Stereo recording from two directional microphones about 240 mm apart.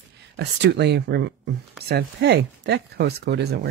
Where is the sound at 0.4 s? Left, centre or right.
Right.